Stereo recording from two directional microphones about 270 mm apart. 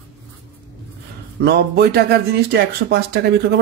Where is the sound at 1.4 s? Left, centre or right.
Right.